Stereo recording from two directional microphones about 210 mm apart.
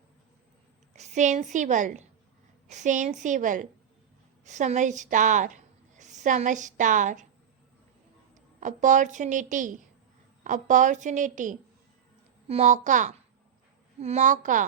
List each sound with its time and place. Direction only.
0.9 s a woman's voice: 35° right (ahead or behind)
8.6 s a woman's voice: 35° right (ahead or behind)